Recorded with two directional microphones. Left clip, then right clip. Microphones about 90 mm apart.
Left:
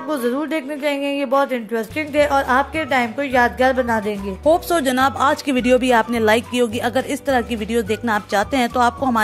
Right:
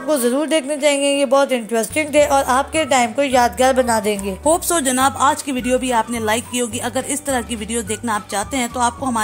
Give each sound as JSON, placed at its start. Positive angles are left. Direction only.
{"t": 0.1, "sound": "speech", "side_deg": -25}
{"t": 4.5, "sound": "speech", "side_deg": 0}
{"t": 5.2, "sound": "a woman's voice", "side_deg": 35}